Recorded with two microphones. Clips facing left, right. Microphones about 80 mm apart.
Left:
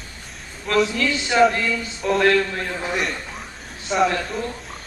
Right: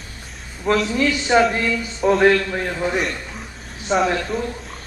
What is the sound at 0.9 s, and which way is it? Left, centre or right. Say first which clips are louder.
Speech: right 4 dB; right.